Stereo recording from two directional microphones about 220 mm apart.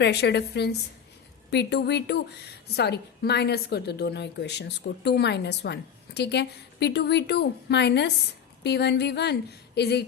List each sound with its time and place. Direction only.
0.0 s a woman's voice: 50° left (ahead or behind)